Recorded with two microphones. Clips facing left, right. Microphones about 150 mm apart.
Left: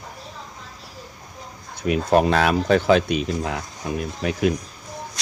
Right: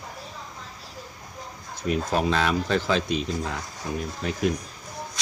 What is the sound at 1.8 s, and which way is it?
Speech, 65° left (ahead or behind).